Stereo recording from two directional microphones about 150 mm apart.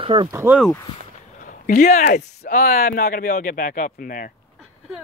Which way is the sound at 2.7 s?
85° left.